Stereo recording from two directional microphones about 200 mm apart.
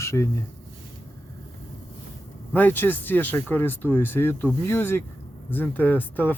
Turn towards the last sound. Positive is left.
turn(degrees=10)  # may be behind; listen again after turning